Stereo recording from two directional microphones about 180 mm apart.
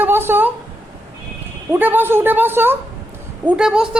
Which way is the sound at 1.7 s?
10° right (ahead or behind).